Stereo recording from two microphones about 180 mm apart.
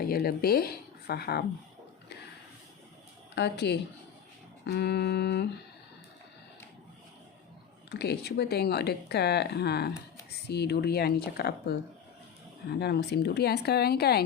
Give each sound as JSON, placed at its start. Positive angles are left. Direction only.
{"t": 0.0, "sound": "speech", "side_deg": 55}
{"t": 3.3, "sound": "a sound", "side_deg": 70}
{"t": 7.9, "sound": "speech", "side_deg": 65}
{"t": 12.8, "sound": "speech", "side_deg": 65}